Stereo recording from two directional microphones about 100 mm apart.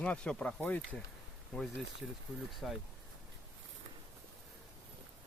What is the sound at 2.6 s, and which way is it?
Speech, centre (ahead or behind).